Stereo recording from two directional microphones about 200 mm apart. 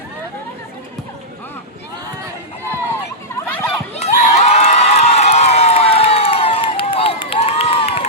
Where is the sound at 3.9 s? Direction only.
35° left (ahead or behind).